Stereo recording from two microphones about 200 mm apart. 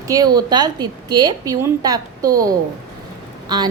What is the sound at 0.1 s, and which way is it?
A woman's voice, 20° right (ahead or behind).